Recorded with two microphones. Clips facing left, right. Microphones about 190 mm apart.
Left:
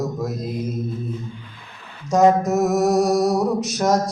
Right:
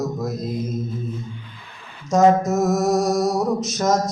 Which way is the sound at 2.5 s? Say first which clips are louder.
Left 1 dB; 15° left (ahead or behind).